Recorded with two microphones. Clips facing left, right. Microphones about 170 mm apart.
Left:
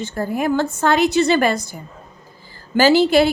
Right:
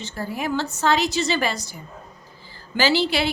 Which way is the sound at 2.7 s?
45° left (ahead or behind).